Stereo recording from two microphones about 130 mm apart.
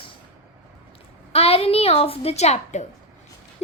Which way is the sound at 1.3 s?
50° left (ahead or behind).